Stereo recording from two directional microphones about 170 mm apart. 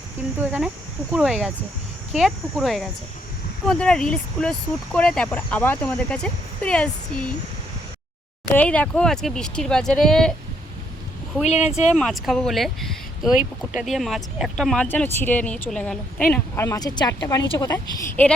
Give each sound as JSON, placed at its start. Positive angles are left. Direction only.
{"t": 0.3, "sound": "speech", "side_deg": -10}
{"t": 8.5, "sound": "speech", "side_deg": 10}
{"t": 11.4, "sound": "speech", "side_deg": 40}
{"t": 11.9, "sound": "a woman's voice", "side_deg": 0}
{"t": 18.2, "sound": "speech", "side_deg": 10}